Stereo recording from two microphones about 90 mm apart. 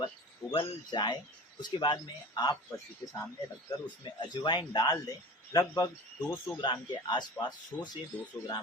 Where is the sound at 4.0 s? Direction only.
60° left (ahead or behind); by 5.9 s 40° left (ahead or behind).